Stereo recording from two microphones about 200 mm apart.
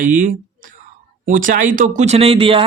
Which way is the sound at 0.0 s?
40° right (ahead or behind).